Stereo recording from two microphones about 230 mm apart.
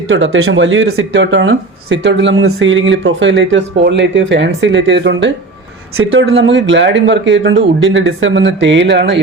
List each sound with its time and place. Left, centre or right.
0.1 s speech: right